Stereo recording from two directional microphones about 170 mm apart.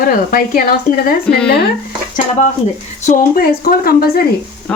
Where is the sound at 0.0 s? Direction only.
55° left (ahead or behind).